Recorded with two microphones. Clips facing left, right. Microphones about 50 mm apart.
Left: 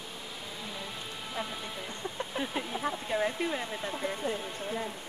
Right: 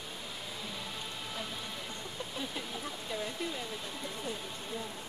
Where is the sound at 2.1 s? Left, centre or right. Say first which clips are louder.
Left 6 dB; left.